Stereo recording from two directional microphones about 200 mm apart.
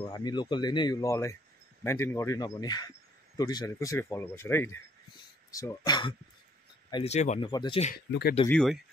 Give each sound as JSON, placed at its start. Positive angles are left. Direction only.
{"t": 0.0, "sound": "speech", "side_deg": 20}
{"t": 7.4, "sound": "speech", "side_deg": 25}
{"t": 8.1, "sound": "speech", "side_deg": 55}
{"t": 8.5, "sound": "speech", "side_deg": 0}